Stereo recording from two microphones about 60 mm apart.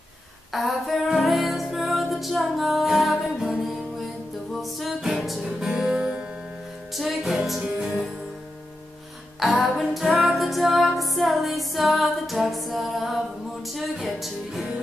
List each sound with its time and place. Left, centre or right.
0.5 s music: centre
4.6 s music: centre
5.9 s music: centre
7.0 s music: centre
9.4 s music: centre